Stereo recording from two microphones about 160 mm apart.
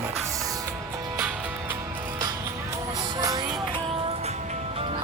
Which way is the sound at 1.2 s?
10° right (ahead or behind).